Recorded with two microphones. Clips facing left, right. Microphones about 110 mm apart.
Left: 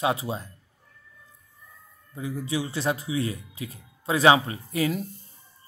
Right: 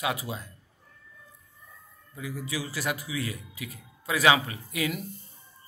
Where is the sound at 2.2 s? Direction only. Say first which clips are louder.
Left 5 dB; 30° left (ahead or behind).